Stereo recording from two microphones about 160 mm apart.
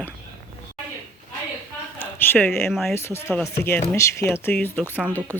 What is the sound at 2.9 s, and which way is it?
Speech, 15° left (ahead or behind).